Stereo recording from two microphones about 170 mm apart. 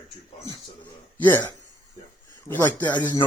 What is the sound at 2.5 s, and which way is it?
Speech, 10° left (ahead or behind).